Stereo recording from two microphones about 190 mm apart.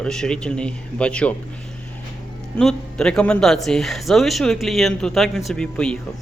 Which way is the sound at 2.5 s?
5° left (ahead or behind).